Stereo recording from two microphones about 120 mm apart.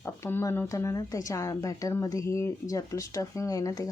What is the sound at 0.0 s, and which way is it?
Speech, 20° left (ahead or behind).